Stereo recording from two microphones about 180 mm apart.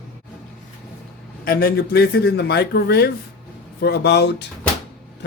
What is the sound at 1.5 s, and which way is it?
Speech, 55° left (ahead or behind).